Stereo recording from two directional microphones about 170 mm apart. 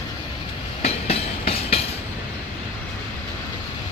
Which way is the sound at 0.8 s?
35° left (ahead or behind).